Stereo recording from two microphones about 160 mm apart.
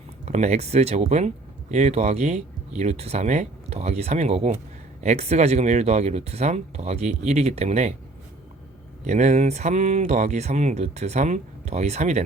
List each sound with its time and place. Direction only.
0.3 s speech: 45° right (ahead or behind)
9.0 s speech: 45° right (ahead or behind)